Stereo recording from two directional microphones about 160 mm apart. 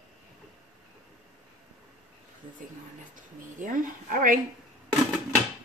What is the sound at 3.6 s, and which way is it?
Speech, 60° right (ahead or behind).